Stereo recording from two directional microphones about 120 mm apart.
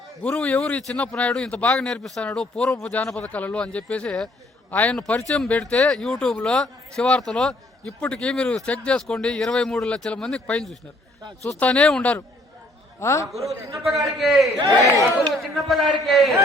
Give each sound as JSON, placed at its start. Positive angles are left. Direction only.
{"t": 0.2, "sound": "speech", "side_deg": 10}
{"t": 13.0, "sound": "a man's voice", "side_deg": 25}
{"t": 13.4, "sound": "a man's voice", "side_deg": -25}
{"t": 14.2, "sound": "a man's voice", "side_deg": 0}